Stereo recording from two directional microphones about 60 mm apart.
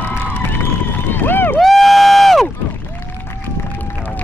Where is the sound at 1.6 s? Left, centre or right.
Centre.